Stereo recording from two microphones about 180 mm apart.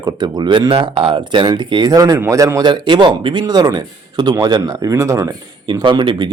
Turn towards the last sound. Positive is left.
turn(degrees=-25)  # may be behind; listen again after turning